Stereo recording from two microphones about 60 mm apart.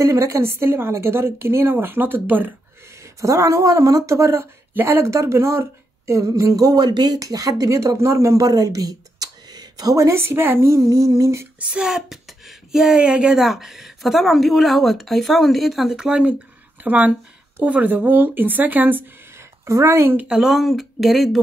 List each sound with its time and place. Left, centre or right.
0.0 s a woman's voice: right
3.2 s a woman's voice: right
9.8 s a woman's voice: right
10.1 s speech: right
10.7 s speech: right
11.6 s a sound: centre
11.9 s speech: centre
16.8 s speech: right
19.6 s a woman's voice: right
20.2 s speech: centre